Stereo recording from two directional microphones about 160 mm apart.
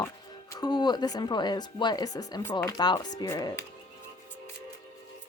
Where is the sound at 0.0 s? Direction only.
25° left (ahead or behind).